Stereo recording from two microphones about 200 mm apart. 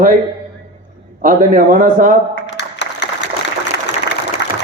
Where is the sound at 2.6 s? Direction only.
60° left (ahead or behind).